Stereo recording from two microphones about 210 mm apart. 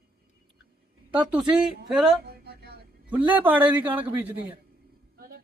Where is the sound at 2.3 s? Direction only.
50° right (ahead or behind).